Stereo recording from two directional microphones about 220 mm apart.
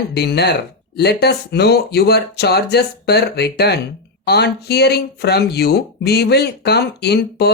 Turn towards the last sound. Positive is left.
turn(degrees=50)  # may be behind; listen again after turning